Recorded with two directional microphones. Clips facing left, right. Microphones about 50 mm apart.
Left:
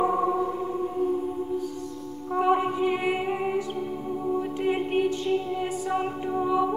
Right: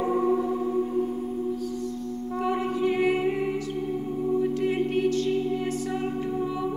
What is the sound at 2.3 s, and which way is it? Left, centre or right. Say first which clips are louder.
Music: left 5 dB; left.